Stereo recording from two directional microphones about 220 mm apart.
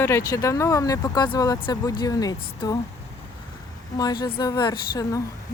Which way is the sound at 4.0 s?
20° left (ahead or behind).